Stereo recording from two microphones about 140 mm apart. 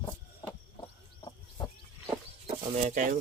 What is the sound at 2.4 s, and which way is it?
Speech, 65° right (ahead or behind).